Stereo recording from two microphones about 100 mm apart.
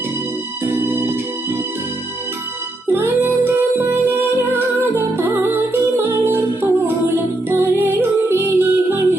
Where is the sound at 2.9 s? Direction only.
20° right (ahead or behind).